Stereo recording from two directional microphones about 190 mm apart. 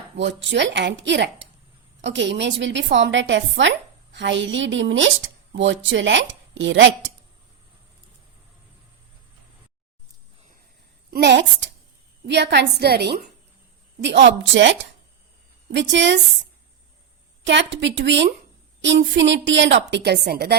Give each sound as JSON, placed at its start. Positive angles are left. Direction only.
{"t": 0.2, "sound": "a woman's voice", "side_deg": -70}
{"t": 11.1, "sound": "a woman's voice", "side_deg": -65}
{"t": 17.4, "sound": "a woman's voice", "side_deg": -70}
{"t": 19.9, "sound": "a woman's voice", "side_deg": -60}